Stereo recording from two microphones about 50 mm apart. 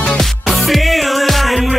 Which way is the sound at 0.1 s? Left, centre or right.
Centre.